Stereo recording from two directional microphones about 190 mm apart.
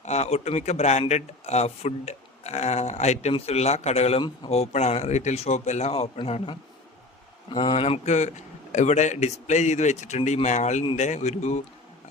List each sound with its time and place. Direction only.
0.0 s speech: 35° left (ahead or behind)